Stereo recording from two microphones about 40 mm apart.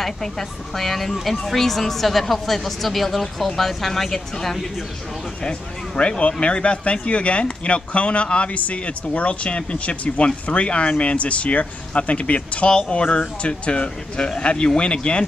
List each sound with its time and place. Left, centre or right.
0.0 s speech: centre
5.4 s speech: left